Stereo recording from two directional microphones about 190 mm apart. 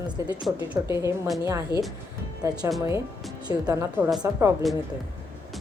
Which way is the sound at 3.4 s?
20° right (ahead or behind).